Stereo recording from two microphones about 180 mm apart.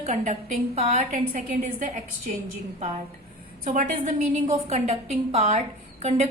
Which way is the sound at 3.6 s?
45° right (ahead or behind).